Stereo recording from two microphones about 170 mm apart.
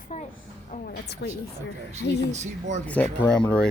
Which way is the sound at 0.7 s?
60° left (ahead or behind).